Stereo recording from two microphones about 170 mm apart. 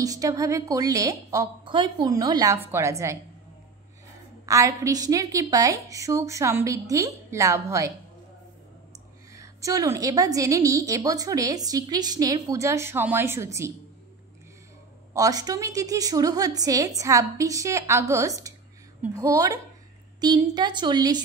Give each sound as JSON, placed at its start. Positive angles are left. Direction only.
{"t": 0.0, "sound": "a woman's voice", "side_deg": -20}
{"t": 4.5, "sound": "a woman's voice", "side_deg": -20}
{"t": 9.3, "sound": "a woman's voice", "side_deg": -20}
{"t": 15.1, "sound": "a woman's voice", "side_deg": -20}